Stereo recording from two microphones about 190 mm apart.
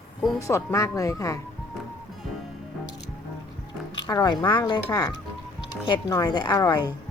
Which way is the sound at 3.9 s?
20° left (ahead or behind).